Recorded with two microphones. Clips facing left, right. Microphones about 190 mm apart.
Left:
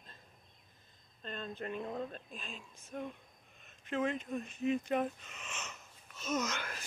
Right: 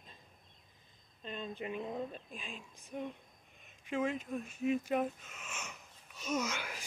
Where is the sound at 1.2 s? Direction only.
10° right (ahead or behind).